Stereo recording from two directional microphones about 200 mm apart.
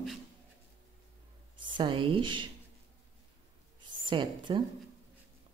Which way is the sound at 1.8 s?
25° right (ahead or behind).